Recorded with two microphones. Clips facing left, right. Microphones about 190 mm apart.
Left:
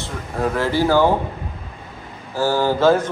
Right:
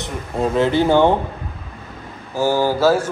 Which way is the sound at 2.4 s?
15° right (ahead or behind).